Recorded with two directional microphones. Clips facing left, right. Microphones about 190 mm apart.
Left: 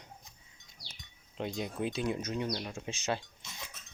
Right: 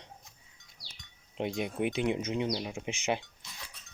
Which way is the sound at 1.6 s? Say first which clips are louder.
Right 3 dB; 20° right (ahead or behind).